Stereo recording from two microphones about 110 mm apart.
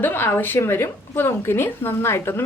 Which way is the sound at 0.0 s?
20° left (ahead or behind).